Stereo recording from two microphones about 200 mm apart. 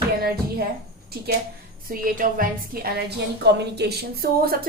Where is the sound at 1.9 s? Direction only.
45° right (ahead or behind).